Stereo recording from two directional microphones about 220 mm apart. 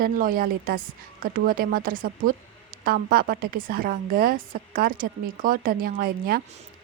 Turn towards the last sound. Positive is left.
turn(degrees=-45)  # may be behind; listen again after turning